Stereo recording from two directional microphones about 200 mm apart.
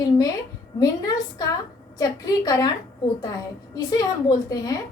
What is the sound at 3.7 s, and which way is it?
A woman's voice, 20° left (ahead or behind).